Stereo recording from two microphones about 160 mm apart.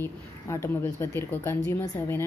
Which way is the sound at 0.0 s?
15° left (ahead or behind).